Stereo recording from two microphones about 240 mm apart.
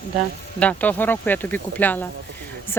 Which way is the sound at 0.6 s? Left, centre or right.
Centre.